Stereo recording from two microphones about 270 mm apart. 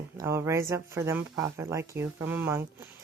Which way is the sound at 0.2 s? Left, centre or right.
Centre.